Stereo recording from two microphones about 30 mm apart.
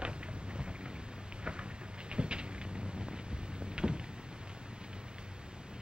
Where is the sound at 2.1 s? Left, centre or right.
Right.